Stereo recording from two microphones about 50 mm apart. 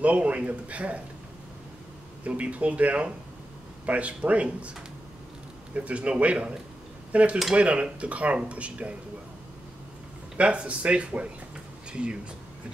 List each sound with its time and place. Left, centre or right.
0.0 s speech: right
2.2 s speech: right
5.8 s speech: right
10.3 s speech: right